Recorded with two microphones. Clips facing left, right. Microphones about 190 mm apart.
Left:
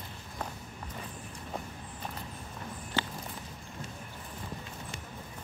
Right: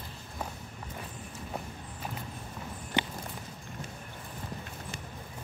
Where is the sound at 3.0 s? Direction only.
15° right (ahead or behind).